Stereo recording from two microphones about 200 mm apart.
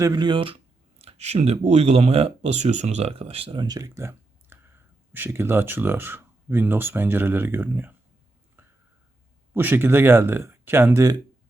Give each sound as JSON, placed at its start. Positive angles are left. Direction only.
{"t": 0.0, "sound": "speech", "side_deg": -20}
{"t": 8.6, "sound": "a sound", "side_deg": -10}
{"t": 9.6, "sound": "speech", "side_deg": -10}